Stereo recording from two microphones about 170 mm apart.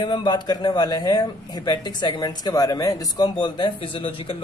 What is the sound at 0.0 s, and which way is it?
A man's voice, 25° left (ahead or behind).